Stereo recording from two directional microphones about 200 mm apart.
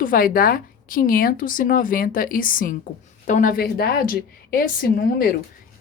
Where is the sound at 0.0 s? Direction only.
45° left (ahead or behind).